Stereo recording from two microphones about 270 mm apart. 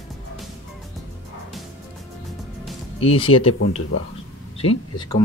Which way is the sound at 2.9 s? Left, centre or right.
Left.